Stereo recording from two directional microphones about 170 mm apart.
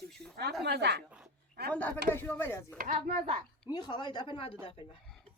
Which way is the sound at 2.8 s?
50° right (ahead or behind).